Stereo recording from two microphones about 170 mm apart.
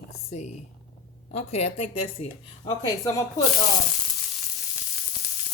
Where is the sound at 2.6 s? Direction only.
20° left (ahead or behind).